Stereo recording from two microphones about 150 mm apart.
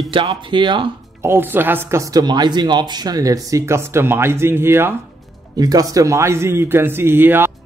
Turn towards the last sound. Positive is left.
turn(degrees=-15)  # may be behind; listen again after turning